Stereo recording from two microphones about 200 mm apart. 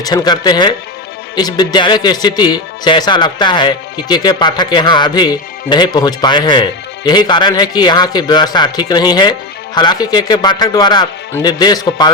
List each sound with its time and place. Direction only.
0.0 s speech: 20° left (ahead or behind)